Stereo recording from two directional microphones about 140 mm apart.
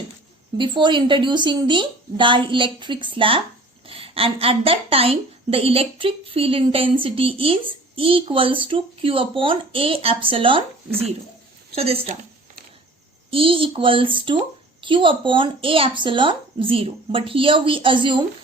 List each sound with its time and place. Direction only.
0.5 s a woman's voice: 35° right (ahead or behind)
13.3 s a woman's voice: 40° right (ahead or behind)